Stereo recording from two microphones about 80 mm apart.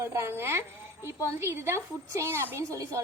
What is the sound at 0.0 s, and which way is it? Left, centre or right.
Speech, right.